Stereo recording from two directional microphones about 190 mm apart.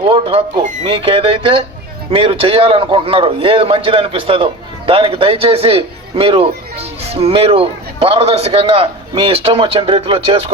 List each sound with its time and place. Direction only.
0.0 s a man's voice: 30° right (ahead or behind)